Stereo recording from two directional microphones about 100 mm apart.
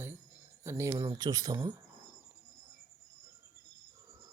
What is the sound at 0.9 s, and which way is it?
Speech, 40° right (ahead or behind).